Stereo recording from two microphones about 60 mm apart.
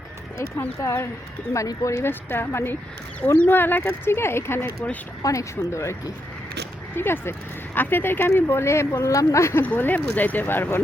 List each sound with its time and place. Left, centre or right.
1.5 s speech: left
2.0 s speech: left
5.2 s speech: left
6.9 s speech: left
9.6 s speech: left